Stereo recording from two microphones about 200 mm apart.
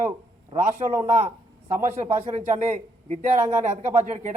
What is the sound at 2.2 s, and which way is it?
A man's voice, 35° right (ahead or behind).